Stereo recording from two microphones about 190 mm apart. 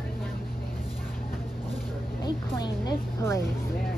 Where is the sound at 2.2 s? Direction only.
20° left (ahead or behind).